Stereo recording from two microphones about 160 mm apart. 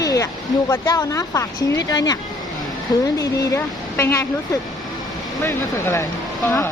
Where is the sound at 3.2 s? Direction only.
20° left (ahead or behind).